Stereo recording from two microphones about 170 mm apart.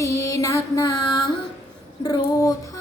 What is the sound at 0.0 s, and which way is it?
Music, 20° left (ahead or behind).